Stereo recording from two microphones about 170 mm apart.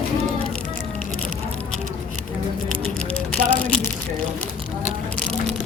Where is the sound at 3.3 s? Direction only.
5° left (ahead or behind).